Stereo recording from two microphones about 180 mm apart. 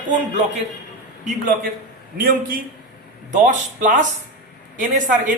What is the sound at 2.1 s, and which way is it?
Speech, 50° right (ahead or behind).